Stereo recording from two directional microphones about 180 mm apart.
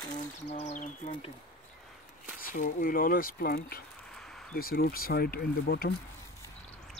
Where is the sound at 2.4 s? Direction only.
45° left (ahead or behind).